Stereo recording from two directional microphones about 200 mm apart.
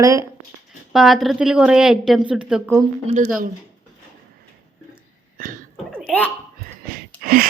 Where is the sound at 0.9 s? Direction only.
Centre (ahead or behind).